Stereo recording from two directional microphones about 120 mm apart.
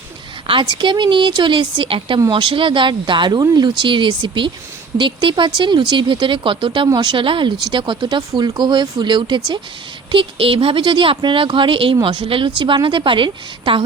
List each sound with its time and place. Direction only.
0.6 s speech: 40° right (ahead or behind)